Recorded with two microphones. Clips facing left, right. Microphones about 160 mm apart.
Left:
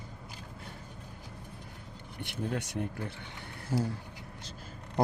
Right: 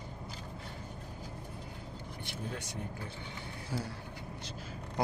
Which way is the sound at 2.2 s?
65° left (ahead or behind).